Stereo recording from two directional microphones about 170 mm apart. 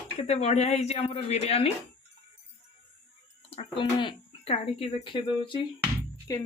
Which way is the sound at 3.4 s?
35° left (ahead or behind).